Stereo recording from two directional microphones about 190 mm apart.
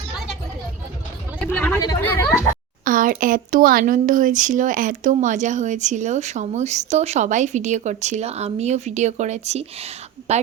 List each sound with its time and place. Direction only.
1.4 s speech: 10° left (ahead or behind)
2.8 s speech: 45° right (ahead or behind)